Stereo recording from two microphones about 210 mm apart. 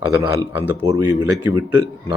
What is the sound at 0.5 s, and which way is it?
Speech, 10° right (ahead or behind).